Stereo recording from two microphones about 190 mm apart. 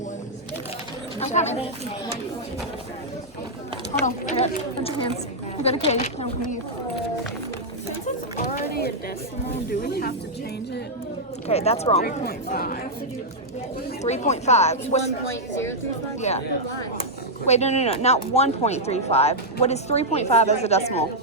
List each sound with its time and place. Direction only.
1.2 s speech: 35° left (ahead or behind)
4.0 s speech: 35° left (ahead or behind)
8.0 s a sound: 40° left (ahead or behind)
9.6 s speech: 55° left (ahead or behind)
11.4 s speech: 35° left (ahead or behind)
12.5 s speech: 50° left (ahead or behind)
14.0 s speech: 35° left (ahead or behind)
15.3 s speech: 15° left (ahead or behind)
16.3 s speech: 35° left (ahead or behind)
17.4 s speech: 35° left (ahead or behind)